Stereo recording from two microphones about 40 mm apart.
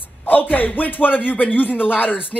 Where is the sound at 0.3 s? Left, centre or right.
Left.